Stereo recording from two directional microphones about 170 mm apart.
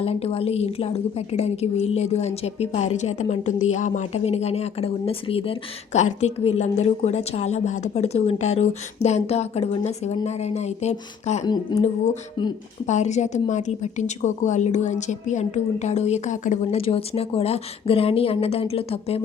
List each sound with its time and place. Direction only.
0.0 s a woman's voice: 35° left (ahead or behind)
11.7 s speech: 25° left (ahead or behind)
12.9 s a woman's voice: 45° left (ahead or behind)